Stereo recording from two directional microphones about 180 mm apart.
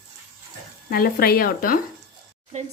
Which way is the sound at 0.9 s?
55° left (ahead or behind).